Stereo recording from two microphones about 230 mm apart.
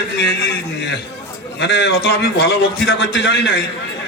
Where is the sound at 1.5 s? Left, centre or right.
Left.